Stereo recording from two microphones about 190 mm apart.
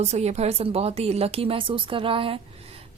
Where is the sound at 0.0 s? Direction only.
35° right (ahead or behind).